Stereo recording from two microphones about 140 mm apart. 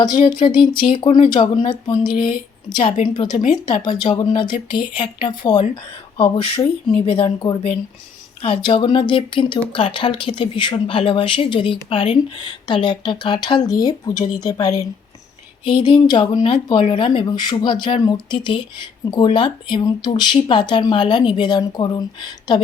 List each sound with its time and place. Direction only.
0.2 s speech: 35° left (ahead or behind)